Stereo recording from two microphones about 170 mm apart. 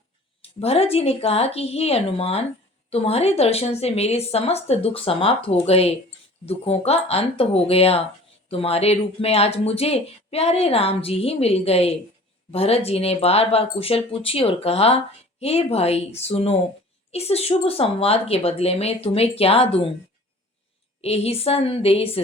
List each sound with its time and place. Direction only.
0.4 s speech: 35° left (ahead or behind)
21.0 s speech: 35° left (ahead or behind)